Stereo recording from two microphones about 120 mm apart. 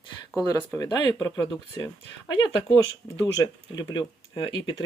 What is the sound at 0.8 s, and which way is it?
Speech, 30° left (ahead or behind).